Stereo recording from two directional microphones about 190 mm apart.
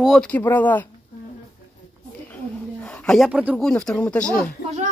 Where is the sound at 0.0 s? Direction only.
Centre (ahead or behind).